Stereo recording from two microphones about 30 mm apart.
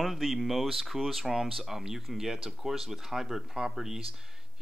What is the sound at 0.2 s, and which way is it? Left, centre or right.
Speech, centre.